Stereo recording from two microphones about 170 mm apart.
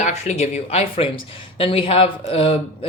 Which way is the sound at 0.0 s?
40° left (ahead or behind).